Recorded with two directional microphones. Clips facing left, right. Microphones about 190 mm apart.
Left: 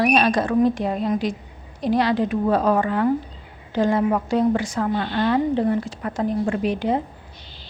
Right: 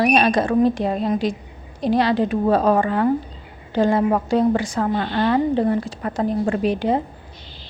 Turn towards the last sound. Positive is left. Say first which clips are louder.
# right 2 dB
turn(degrees=-35)  # may be behind; listen again after turning